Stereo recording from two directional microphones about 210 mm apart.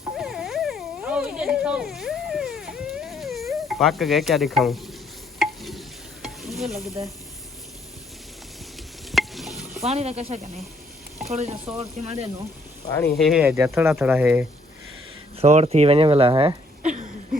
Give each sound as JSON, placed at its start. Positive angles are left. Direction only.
{"t": 0.2, "sound": "a sound", "side_deg": 0}
{"t": 5.4, "sound": "stir", "side_deg": 0}
{"t": 9.1, "sound": "stir", "side_deg": 0}
{"t": 9.8, "sound": "speech", "side_deg": -30}
{"t": 13.0, "sound": "speech", "side_deg": 0}
{"t": 15.4, "sound": "speech", "side_deg": -30}
{"t": 16.8, "sound": "a sound", "side_deg": -35}